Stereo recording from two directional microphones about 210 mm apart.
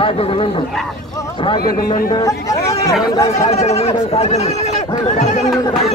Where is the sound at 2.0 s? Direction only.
15° left (ahead or behind).